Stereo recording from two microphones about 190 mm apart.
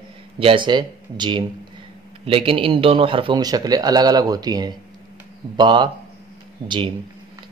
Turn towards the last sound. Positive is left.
turn(degrees=-25)  # may be behind; listen again after turning